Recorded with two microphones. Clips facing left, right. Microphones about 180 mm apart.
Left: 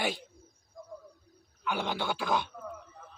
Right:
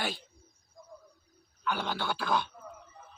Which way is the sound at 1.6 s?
15° left (ahead or behind).